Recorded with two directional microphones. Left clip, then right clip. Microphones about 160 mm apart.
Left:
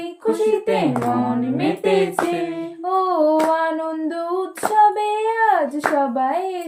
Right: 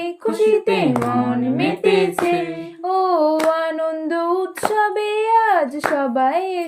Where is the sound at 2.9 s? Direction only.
40° right (ahead or behind).